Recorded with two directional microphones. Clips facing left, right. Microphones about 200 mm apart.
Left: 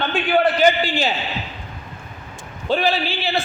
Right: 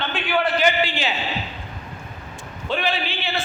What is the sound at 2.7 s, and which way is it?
Speech, 35° left (ahead or behind).